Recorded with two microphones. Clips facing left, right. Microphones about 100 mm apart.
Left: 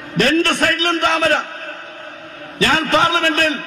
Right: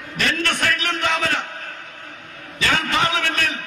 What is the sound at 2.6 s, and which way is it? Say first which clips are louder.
Speech: left 6 dB; 40° left (ahead or behind).